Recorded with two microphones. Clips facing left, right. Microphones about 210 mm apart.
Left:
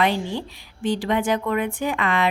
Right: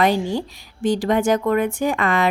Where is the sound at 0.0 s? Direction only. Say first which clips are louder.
Right 4 dB; 40° right (ahead or behind).